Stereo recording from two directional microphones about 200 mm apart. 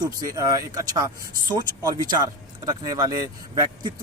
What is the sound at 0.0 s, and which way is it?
Speech, 15° right (ahead or behind).